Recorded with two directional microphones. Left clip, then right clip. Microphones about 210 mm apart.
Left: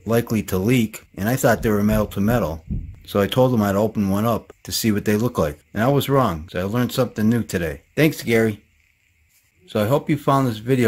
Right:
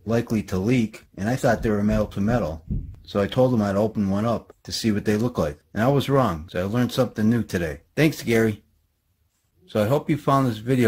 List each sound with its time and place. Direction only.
0.0 s speech: 15° left (ahead or behind)
9.7 s speech: 5° left (ahead or behind)